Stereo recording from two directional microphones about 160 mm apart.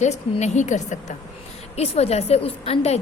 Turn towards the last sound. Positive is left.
turn(degrees=40)  # may be behind; listen again after turning